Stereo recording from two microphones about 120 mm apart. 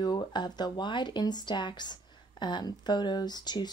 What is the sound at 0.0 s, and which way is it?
Speech, 40° left (ahead or behind).